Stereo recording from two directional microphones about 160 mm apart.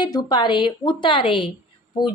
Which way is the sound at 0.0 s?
25° left (ahead or behind).